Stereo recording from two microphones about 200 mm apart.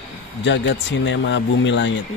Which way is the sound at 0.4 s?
65° left (ahead or behind).